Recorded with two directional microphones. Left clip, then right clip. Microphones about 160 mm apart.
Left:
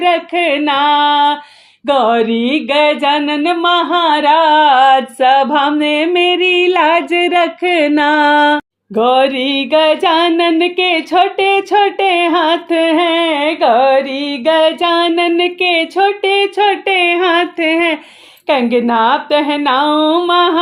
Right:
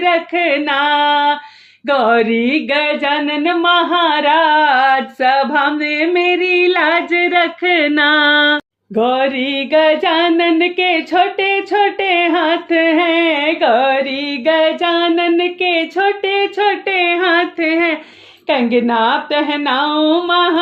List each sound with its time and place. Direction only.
0.0 s music: 40° left (ahead or behind)
18.4 s speech: 45° left (ahead or behind)